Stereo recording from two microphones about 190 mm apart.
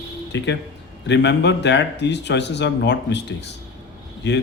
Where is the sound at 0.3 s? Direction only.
65° left (ahead or behind).